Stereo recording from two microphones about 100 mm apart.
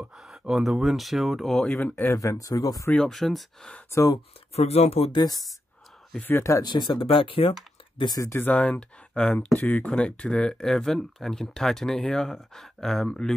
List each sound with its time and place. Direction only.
0.2 s speech: 5° right (ahead or behind)
1.7 s speech: 15° left (ahead or behind)
2.1 s speech: 35° left (ahead or behind)
2.9 s speech: 5° left (ahead or behind)
3.9 s speech: 35° left (ahead or behind)
4.6 s speech: 90° left
5.1 s speech: 40° left (ahead or behind)
6.2 s speech: 25° left (ahead or behind)
6.6 s speech: 50° left (ahead or behind)
8.2 s speech: 25° left (ahead or behind); by 13.3 s 5° left (ahead or behind)